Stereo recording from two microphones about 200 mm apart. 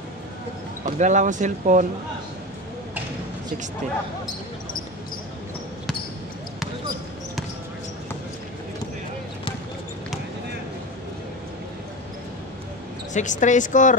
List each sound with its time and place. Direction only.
0.8 s speech: 35° right (ahead or behind)
13.1 s speech: 40° left (ahead or behind)